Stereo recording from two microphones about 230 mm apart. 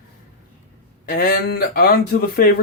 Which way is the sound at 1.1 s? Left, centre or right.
Left.